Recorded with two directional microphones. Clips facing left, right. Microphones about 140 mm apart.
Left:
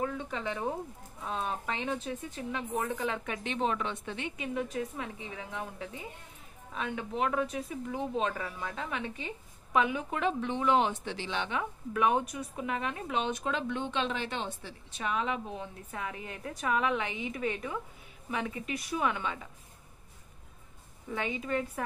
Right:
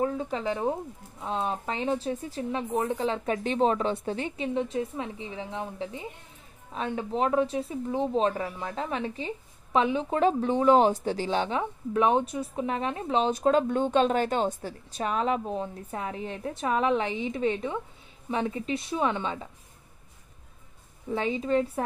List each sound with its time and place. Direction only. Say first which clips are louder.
0.0 s a woman's voice: right 6 dB; 35° right (ahead or behind)
21.1 s a woman's voice: right 7 dB; 30° right (ahead or behind)